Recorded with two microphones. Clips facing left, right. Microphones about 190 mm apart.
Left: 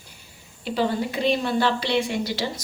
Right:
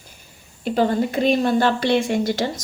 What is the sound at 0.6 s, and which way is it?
Speech, 50° right (ahead or behind).